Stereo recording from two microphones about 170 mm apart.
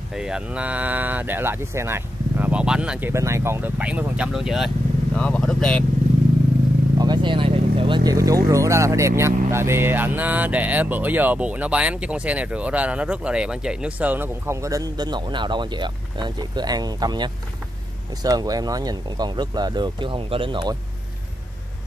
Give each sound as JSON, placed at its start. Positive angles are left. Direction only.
{"t": 0.1, "sound": "speech", "side_deg": -5}
{"t": 7.0, "sound": "vehicle", "side_deg": -25}
{"t": 8.5, "sound": "speech", "side_deg": -15}